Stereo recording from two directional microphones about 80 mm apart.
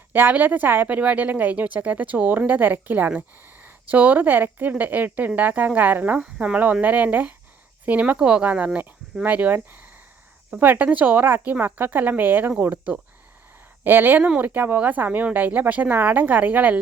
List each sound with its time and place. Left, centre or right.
0.1 s speech: right